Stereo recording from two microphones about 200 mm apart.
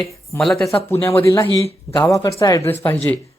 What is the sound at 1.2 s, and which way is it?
Speech, 15° left (ahead or behind).